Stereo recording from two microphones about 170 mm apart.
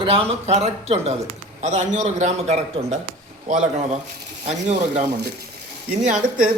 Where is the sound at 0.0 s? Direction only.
35° right (ahead or behind).